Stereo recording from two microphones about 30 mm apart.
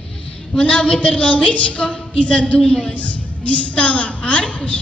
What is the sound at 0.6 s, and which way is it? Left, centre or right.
A woman's voice, left.